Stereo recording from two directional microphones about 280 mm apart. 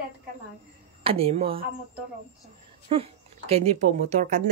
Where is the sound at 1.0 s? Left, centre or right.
Centre.